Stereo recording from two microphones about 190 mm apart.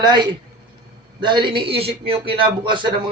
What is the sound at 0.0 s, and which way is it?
A man's voice, 25° right (ahead or behind).